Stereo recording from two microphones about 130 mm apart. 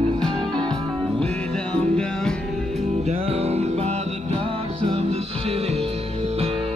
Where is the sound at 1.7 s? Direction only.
5° left (ahead or behind).